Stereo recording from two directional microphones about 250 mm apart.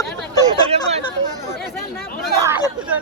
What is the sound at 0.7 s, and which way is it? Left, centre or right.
Chatter, right.